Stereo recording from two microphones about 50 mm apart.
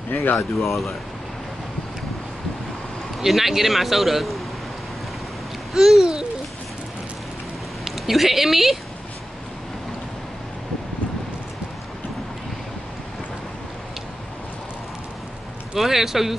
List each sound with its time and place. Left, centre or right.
0.1 s speech: left
0.6 s a man's voice: centre
3.2 s a man's voice: centre
5.7 s babbling: centre
7.8 s speech: centre
15.7 s a man's voice: centre